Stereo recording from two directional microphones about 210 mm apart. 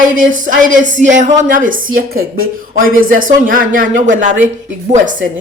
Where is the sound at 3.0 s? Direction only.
40° right (ahead or behind).